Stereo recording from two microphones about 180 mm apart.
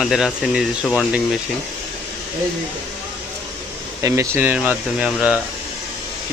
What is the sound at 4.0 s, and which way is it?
Speech, 15° right (ahead or behind).